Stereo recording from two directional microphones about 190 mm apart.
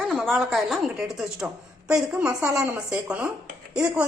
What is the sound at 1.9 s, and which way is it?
A woman's voice, 15° right (ahead or behind).